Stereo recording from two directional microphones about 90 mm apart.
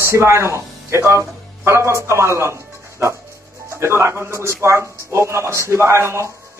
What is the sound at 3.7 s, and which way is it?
A man's voice, 30° right (ahead or behind).